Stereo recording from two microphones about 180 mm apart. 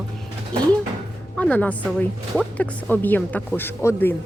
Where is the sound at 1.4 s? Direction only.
10° left (ahead or behind).